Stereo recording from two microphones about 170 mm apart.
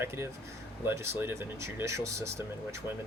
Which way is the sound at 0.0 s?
15° right (ahead or behind).